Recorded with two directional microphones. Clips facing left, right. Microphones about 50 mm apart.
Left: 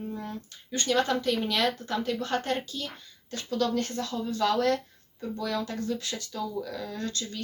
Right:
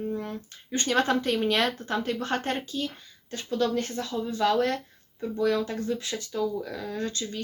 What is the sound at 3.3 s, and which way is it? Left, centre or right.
Speech, right.